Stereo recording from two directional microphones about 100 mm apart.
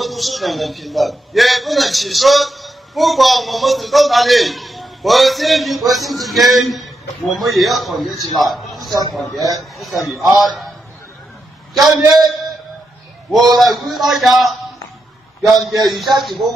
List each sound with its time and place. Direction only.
0.0 s a man's voice: centre (ahead or behind)
11.7 s a man's voice: centre (ahead or behind)
13.6 s a man's voice: centre (ahead or behind)